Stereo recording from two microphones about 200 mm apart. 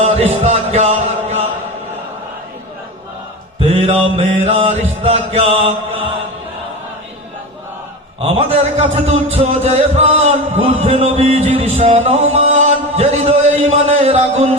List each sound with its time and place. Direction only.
0.0 s music: 30° right (ahead or behind)
3.6 s music: 30° right (ahead or behind)
8.2 s music: 30° right (ahead or behind)